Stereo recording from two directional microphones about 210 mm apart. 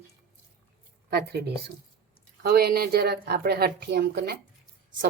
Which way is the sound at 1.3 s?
50° right (ahead or behind).